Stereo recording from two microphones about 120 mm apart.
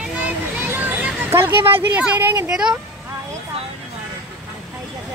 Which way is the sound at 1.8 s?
10° right (ahead or behind).